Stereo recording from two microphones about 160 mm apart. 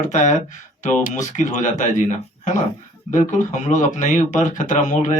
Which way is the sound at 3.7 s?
50° left (ahead or behind).